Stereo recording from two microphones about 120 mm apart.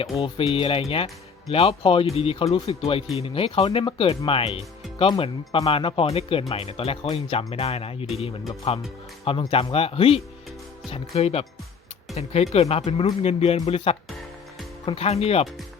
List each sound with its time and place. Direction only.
0.2 s speech: 50° left (ahead or behind)